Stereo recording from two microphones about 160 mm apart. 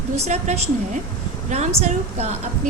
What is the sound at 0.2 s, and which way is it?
A woman's voice, 45° right (ahead or behind).